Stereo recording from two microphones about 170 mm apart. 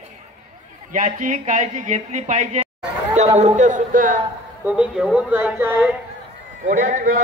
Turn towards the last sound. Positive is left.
turn(degrees=-50)  # may be behind; listen again after turning